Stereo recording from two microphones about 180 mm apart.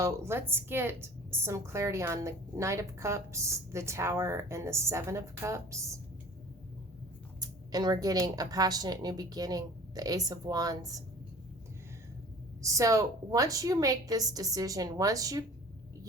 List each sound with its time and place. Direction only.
0.0 s a woman's voice: 15° right (ahead or behind)
7.3 s speech: 20° right (ahead or behind)
12.6 s speech: 20° right (ahead or behind)